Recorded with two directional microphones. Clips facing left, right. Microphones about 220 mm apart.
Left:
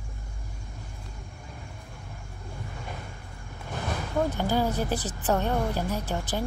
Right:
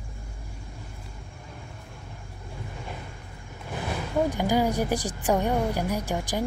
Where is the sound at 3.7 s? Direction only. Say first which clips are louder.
Right 2 dB; 10° right (ahead or behind).